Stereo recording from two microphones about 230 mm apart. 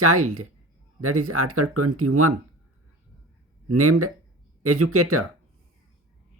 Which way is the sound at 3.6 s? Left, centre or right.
Right.